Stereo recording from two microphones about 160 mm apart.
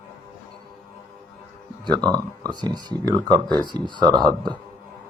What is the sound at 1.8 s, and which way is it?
Speech, 25° right (ahead or behind).